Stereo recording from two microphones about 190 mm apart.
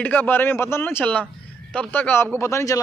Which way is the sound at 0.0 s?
10° left (ahead or behind).